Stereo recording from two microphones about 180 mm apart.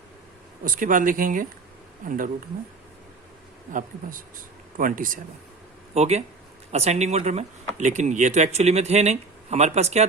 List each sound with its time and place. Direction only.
0.6 s speech: 50° right (ahead or behind)
3.7 s speech: 50° right (ahead or behind)
5.9 s speech: 35° right (ahead or behind)